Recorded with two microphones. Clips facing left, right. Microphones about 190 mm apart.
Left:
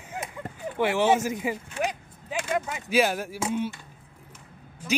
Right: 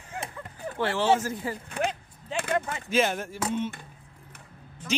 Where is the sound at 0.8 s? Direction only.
15° left (ahead or behind).